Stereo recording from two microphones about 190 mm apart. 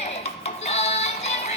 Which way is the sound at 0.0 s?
35° left (ahead or behind).